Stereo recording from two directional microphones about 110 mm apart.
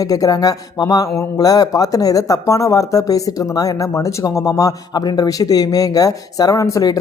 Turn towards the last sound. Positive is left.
turn(degrees=30)  # may be behind; listen again after turning